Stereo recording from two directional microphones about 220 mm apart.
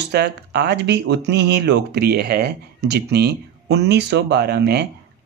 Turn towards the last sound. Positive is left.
turn(degrees=-50)  # may be behind; listen again after turning